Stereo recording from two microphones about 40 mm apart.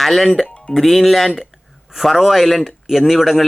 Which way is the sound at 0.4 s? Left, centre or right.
Left.